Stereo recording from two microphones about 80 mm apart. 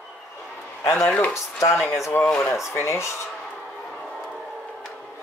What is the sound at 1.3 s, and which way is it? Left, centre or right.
Speech, left.